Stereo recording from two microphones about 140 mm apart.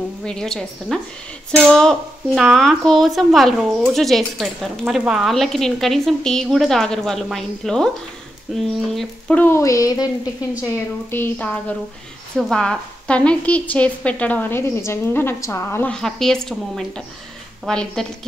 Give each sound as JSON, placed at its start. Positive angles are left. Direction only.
{"t": 0.2, "sound": "speech", "side_deg": 5}
{"t": 9.4, "sound": "a sound", "side_deg": 20}
{"t": 11.1, "sound": "a woman's voice", "side_deg": 15}
{"t": 15.9, "sound": "speech", "side_deg": 5}